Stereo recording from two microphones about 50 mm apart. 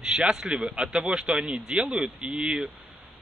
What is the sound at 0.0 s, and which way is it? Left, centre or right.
Speech, centre.